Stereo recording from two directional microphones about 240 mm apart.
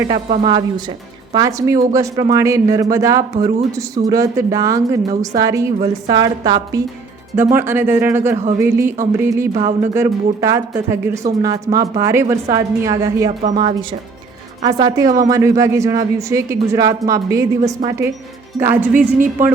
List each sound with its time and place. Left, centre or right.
0.3 s speech: right
13.4 s speech: right
14.6 s speech: centre
18.5 s speech: centre
18.9 s a woman's voice: right